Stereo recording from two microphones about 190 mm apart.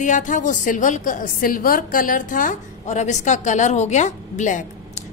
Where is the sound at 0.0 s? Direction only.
40° left (ahead or behind).